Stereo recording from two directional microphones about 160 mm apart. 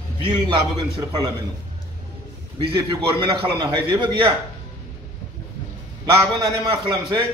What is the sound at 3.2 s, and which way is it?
A man's voice, 30° right (ahead or behind).